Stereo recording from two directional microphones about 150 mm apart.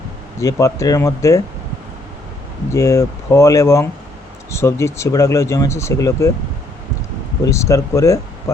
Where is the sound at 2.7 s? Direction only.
20° left (ahead or behind).